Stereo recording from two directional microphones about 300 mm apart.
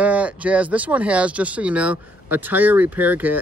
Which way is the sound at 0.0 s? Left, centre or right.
Centre.